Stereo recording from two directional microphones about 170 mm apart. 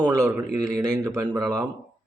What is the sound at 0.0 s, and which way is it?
Mantra, 15° right (ahead or behind).